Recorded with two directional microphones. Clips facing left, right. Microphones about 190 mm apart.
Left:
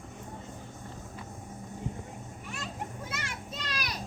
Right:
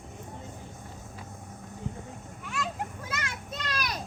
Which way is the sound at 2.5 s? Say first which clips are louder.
Right 6 dB; 90° right.